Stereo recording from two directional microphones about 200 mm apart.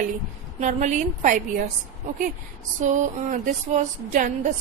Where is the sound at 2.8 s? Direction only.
40° right (ahead or behind).